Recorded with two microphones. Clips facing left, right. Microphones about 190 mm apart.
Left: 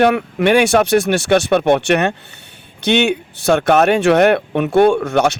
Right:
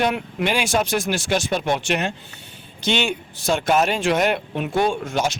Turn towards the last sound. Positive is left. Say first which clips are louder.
# left 9 dB
turn(degrees=70)  # may be behind; listen again after turning